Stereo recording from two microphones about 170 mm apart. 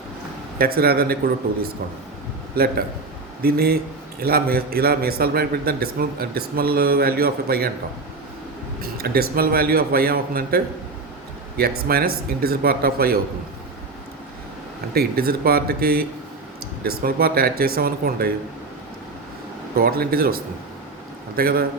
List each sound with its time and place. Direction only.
0.6 s a man's voice: 65° right (ahead or behind)
2.6 s a man's voice: 65° right (ahead or behind)
8.8 s a man's voice: 65° right (ahead or behind)
14.9 s a man's voice: 60° right (ahead or behind)
19.7 s a man's voice: 60° right (ahead or behind)